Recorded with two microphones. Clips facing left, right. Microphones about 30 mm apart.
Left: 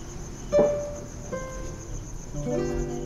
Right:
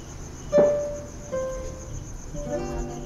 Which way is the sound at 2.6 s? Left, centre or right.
Centre.